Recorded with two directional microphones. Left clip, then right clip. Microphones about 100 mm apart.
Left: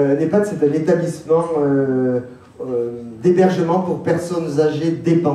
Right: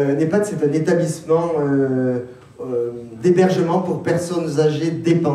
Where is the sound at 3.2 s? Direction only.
50° right (ahead or behind).